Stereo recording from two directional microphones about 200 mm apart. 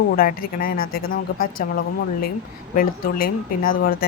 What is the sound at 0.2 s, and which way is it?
Speech, 45° left (ahead or behind).